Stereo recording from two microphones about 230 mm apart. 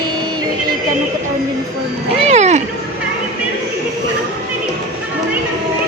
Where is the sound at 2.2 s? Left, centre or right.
Right.